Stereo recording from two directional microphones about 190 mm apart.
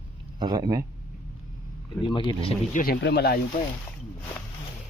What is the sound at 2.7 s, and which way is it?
Speech, 50° left (ahead or behind).